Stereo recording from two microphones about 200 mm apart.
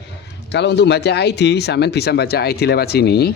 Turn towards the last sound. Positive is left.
turn(degrees=55)  # may be behind; listen again after turning